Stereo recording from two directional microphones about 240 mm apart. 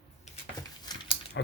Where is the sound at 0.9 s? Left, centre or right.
Centre.